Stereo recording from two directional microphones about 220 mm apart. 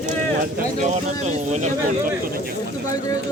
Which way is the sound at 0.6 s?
35° right (ahead or behind).